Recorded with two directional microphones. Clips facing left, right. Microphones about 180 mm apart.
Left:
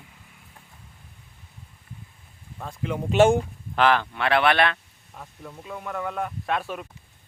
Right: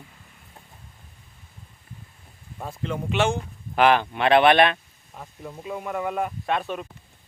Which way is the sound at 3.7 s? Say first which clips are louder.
Right 2 dB; 15° right (ahead or behind).